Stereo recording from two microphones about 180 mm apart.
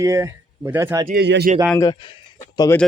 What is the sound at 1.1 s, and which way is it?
Speech, 65° right (ahead or behind).